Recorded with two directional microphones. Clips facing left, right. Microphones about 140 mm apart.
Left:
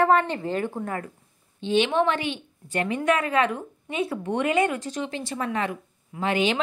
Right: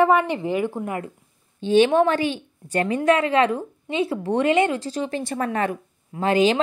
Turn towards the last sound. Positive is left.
turn(degrees=-35)  # may be behind; listen again after turning